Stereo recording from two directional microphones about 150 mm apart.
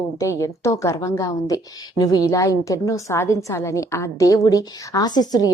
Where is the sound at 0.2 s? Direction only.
20° left (ahead or behind).